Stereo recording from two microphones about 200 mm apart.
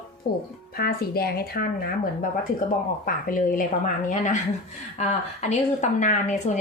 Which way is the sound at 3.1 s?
45° left (ahead or behind).